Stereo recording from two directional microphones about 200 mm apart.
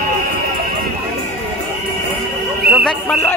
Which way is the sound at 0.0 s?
45° right (ahead or behind).